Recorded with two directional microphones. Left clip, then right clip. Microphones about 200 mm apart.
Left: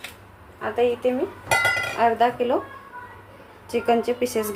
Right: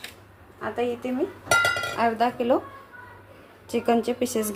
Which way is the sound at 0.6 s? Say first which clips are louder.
Left 6 dB; 30° right (ahead or behind).